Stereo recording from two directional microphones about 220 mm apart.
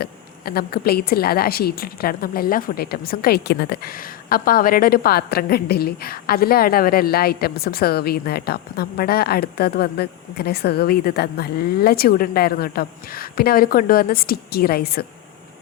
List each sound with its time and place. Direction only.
0.0 s a woman's voice: 45° left (ahead or behind)